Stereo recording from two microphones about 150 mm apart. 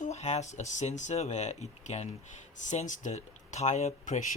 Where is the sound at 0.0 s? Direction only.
50° left (ahead or behind).